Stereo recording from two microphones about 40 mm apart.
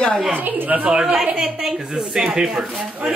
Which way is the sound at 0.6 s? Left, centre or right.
Right.